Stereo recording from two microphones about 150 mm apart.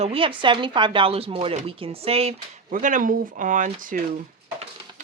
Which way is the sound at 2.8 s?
60° right (ahead or behind).